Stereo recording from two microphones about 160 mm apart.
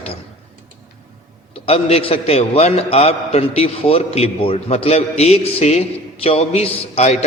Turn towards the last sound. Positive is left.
turn(degrees=45)  # may be behind; listen again after turning